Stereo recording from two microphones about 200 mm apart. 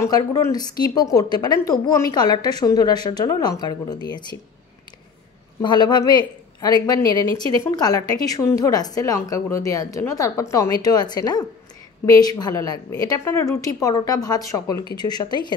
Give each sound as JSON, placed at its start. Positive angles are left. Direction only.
{"t": 0.0, "sound": "a woman's voice", "side_deg": 15}
{"t": 5.6, "sound": "a woman's voice", "side_deg": 20}